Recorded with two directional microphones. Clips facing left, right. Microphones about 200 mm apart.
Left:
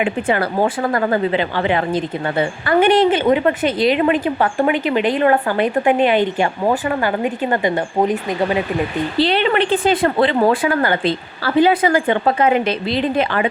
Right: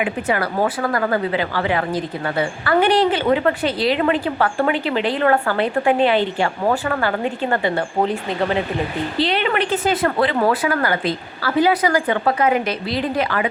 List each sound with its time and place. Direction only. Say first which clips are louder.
0.0 s a woman's voice: left 3 dB; 25° left (ahead or behind)
9.1 s a woman's voice: left 4 dB; 30° left (ahead or behind)